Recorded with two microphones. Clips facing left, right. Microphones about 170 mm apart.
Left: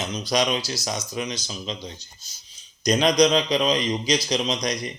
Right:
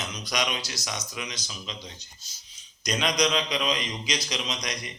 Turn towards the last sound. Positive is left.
turn(degrees=35)  # may be behind; listen again after turning